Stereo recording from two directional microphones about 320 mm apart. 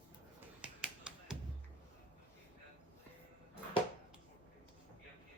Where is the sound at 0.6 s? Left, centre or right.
Centre.